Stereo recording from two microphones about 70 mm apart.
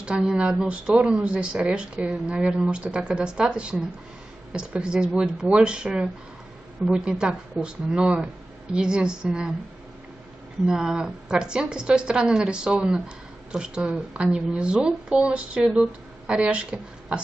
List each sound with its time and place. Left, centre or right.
0.0 s a woman's voice: centre
10.7 s a woman's voice: centre